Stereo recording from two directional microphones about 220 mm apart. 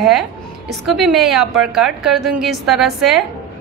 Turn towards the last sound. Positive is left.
turn(degrees=0)  # may be behind; listen again after turning